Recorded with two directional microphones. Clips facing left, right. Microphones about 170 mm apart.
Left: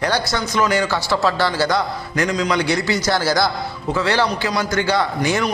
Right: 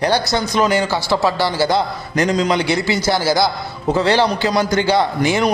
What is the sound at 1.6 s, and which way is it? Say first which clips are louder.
A man's voice: right 2 dB; 30° right (ahead or behind).